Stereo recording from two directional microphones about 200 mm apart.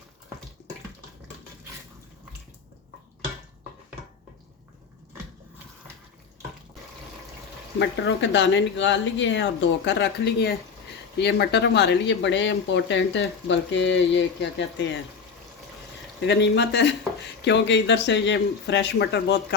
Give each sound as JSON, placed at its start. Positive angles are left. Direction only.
{"t": 7.8, "sound": "speech", "side_deg": 60}
{"t": 16.2, "sound": "speech", "side_deg": 60}